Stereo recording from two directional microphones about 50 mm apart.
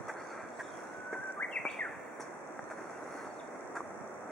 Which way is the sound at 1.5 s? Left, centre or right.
Centre.